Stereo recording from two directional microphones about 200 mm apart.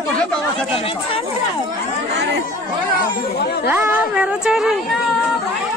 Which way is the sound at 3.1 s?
55° left (ahead or behind).